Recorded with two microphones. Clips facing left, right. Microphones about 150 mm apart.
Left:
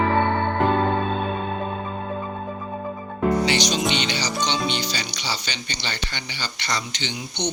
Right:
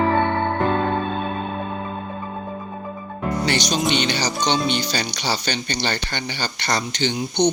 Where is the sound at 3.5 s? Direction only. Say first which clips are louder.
Right 1 dB; 50° right (ahead or behind).